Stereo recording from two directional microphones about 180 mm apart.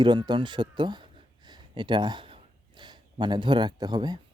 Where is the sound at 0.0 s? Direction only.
25° right (ahead or behind).